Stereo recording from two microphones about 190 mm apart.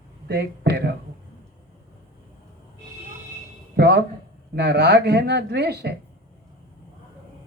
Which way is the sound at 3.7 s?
60° right (ahead or behind).